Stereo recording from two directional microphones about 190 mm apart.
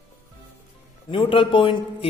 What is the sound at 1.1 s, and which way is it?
Speech, 25° left (ahead or behind).